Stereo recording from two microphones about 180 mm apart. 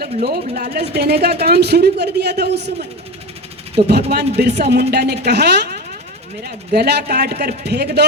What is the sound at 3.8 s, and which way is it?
Speech, 65° right (ahead or behind).